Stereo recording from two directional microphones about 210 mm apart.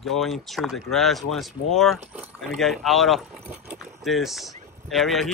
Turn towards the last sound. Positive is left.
turn(degrees=0)  # may be behind; listen again after turning